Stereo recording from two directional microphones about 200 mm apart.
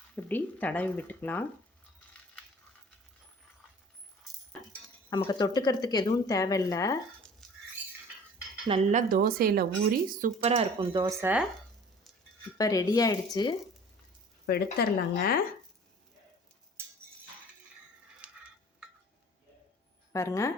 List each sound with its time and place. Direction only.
0.2 s a woman's voice: 10° left (ahead or behind)
5.1 s a woman's voice: 20° left (ahead or behind)
8.9 s speech: 40° right (ahead or behind)
11.0 s speech: 10° right (ahead or behind)
12.5 s a woman's voice: 20° left (ahead or behind)
14.4 s speech: 50° left (ahead or behind)
18.2 s a sound: 5° right (ahead or behind)
20.1 s a woman's voice: 15° left (ahead or behind)